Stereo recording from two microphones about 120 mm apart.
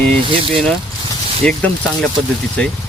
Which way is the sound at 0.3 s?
50° right (ahead or behind).